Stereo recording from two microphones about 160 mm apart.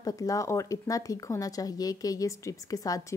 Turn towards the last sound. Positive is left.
turn(degrees=20)  # may be behind; listen again after turning